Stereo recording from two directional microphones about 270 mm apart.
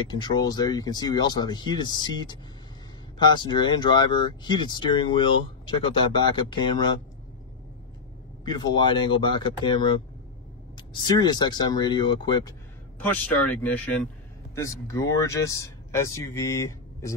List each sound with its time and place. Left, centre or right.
0.1 s speech: centre
8.5 s speech: centre
13.1 s speech: centre